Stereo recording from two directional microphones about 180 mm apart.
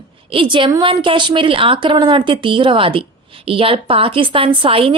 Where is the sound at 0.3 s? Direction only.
25° right (ahead or behind).